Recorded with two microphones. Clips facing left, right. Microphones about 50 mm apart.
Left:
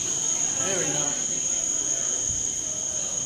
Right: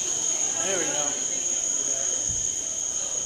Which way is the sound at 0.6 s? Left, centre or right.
Centre.